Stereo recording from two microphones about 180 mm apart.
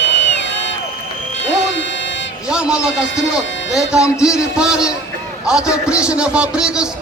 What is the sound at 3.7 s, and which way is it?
A man's voice, 5° right (ahead or behind).